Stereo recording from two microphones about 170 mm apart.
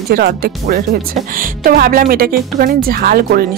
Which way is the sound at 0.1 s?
65° right (ahead or behind).